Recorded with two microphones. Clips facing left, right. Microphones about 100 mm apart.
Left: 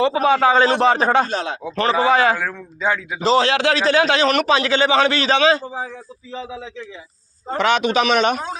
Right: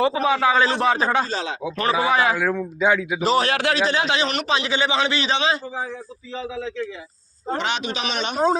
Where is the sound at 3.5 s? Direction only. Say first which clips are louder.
Left 4 dB; 30° left (ahead or behind).